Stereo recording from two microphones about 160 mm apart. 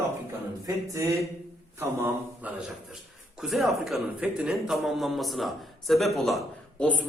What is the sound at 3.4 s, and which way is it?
A man's voice, centre (ahead or behind).